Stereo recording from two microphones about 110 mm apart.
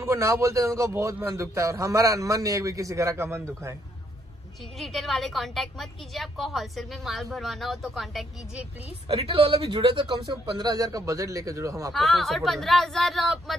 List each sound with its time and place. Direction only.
0.0 s a man's voice: 25° right (ahead or behind)
4.7 s a woman's voice: centre (ahead or behind)
9.1 s a man's voice: 60° right (ahead or behind); by 10.1 s 45° right (ahead or behind)
10.6 s a man's voice: 35° right (ahead or behind)
11.9 s a woman's voice: centre (ahead or behind)